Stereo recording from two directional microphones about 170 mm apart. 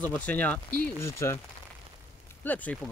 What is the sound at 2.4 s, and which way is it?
Speech, 10° left (ahead or behind).